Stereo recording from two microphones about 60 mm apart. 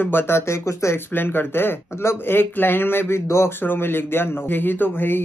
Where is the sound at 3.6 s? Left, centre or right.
Left.